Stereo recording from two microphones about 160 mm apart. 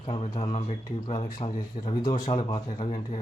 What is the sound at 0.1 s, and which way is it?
Speech, 35° left (ahead or behind).